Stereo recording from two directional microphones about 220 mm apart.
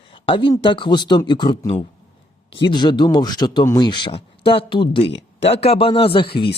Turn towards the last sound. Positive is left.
turn(degrees=25)  # may be behind; listen again after turning